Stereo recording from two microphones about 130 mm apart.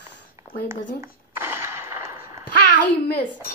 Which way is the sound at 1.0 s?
20° right (ahead or behind).